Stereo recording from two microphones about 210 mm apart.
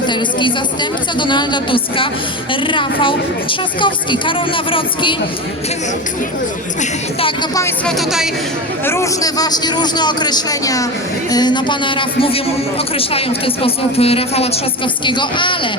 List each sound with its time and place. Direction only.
0.1 s a man's voice: 20° left (ahead or behind)
7.2 s a man's voice: 25° left (ahead or behind)
7.6 s speech: centre (ahead or behind)
8.8 s a man's voice: 10° left (ahead or behind)